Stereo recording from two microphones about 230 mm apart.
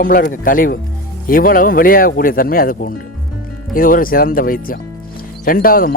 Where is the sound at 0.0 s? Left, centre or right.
Left.